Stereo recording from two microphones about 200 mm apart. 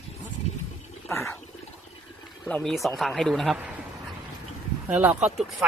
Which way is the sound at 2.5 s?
5° left (ahead or behind).